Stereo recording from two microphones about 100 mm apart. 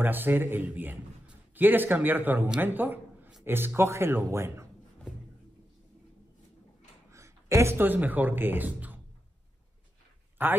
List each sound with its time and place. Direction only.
0.0 s a man's voice: 20° right (ahead or behind)
7.1 s a man's voice: 30° right (ahead or behind)
10.4 s speech: 20° right (ahead or behind)